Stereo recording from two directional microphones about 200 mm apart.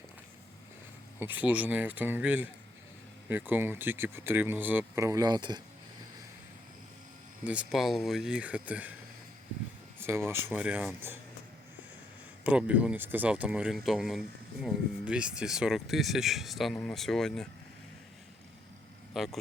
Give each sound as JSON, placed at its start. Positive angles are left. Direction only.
{"t": 1.2, "sound": "speech", "side_deg": -10}
{"t": 7.4, "sound": "speech", "side_deg": -5}
{"t": 10.0, "sound": "speech", "side_deg": -10}
{"t": 12.5, "sound": "speech", "side_deg": -5}
{"t": 19.1, "sound": "a man's voice", "side_deg": 0}